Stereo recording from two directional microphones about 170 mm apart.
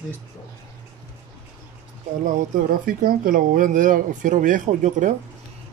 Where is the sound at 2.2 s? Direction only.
55° right (ahead or behind).